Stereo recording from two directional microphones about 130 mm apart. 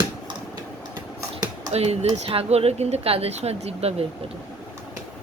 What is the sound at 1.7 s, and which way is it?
Speech, 55° right (ahead or behind).